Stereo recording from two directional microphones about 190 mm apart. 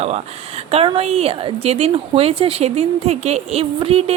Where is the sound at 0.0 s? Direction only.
35° right (ahead or behind).